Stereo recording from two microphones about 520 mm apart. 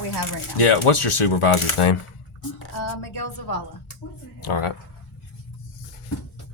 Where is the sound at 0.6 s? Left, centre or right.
Left.